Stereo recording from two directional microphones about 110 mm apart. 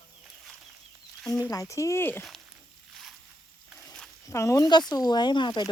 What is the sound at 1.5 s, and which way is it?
Speech, 30° left (ahead or behind).